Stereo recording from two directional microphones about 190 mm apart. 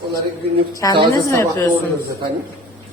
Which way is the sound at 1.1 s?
15° left (ahead or behind).